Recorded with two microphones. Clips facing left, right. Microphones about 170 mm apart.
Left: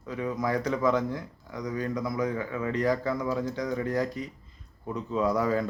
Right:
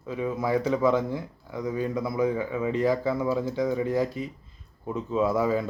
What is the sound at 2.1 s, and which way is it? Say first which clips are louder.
Speech: right 4 dB; 10° right (ahead or behind).